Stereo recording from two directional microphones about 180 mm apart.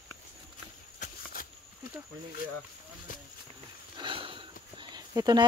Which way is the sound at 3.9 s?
30° right (ahead or behind).